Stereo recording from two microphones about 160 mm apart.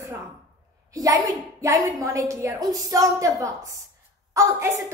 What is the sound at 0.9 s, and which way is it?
A woman's voice, 20° right (ahead or behind).